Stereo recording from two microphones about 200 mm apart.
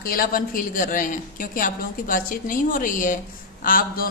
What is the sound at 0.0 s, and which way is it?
A woman's voice, 45° left (ahead or behind).